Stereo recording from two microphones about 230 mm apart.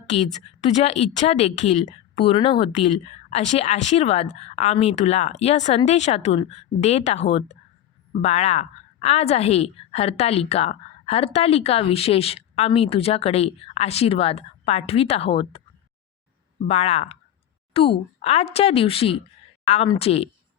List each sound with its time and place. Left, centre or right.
0.1 s speech: left
16.6 s speech: left